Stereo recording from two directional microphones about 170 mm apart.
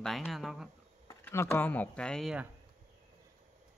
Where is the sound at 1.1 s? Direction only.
15° left (ahead or behind); by 2.5 s centre (ahead or behind).